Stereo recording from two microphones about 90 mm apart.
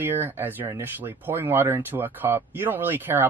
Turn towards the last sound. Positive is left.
turn(degrees=-20)  # may be behind; listen again after turning